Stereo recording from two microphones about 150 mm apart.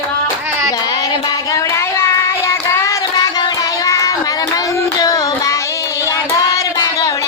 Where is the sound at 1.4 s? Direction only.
20° left (ahead or behind).